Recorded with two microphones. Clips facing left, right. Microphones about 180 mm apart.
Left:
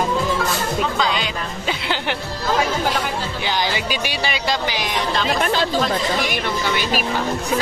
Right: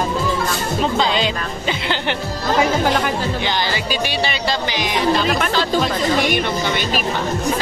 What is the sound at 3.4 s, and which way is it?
Speech, 15° left (ahead or behind).